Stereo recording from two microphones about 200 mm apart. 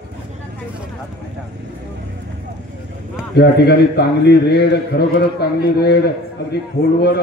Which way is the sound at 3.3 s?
55° left (ahead or behind).